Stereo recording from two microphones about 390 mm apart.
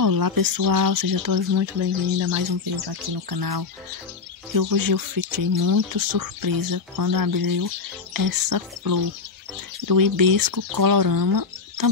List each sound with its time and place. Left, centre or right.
0.0 s speech: right
2.1 s bird: right
2.7 s speech: right